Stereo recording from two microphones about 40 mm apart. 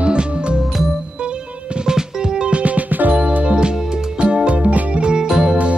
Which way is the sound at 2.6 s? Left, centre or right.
Right.